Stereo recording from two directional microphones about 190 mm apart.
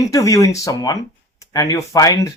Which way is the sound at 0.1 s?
15° left (ahead or behind).